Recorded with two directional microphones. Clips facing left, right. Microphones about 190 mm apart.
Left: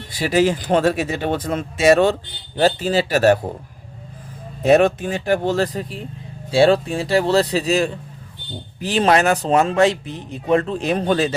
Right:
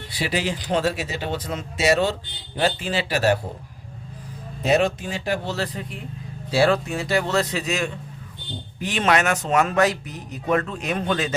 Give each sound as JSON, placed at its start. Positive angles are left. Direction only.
{"t": 0.1, "sound": "speech", "side_deg": 45}
{"t": 2.6, "sound": "speech", "side_deg": 40}
{"t": 4.7, "sound": "speech", "side_deg": 55}
{"t": 6.5, "sound": "speech", "side_deg": 30}